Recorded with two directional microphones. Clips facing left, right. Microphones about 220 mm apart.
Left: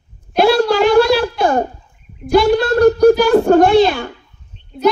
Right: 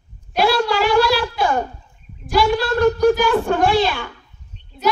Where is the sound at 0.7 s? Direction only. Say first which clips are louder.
Left 6 dB; 40° left (ahead or behind).